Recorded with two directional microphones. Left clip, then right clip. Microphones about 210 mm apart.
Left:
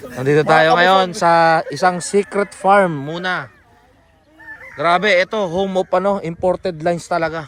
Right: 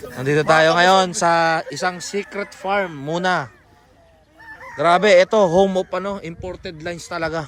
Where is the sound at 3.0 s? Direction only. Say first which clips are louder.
Right 2 dB; 15° right (ahead or behind).